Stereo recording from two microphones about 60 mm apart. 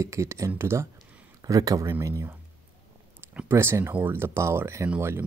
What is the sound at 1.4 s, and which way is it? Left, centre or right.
Speech, right.